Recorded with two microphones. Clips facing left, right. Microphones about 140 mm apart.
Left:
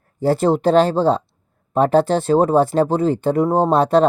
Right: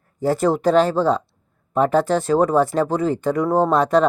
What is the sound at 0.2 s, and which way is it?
Speech, 30° left (ahead or behind).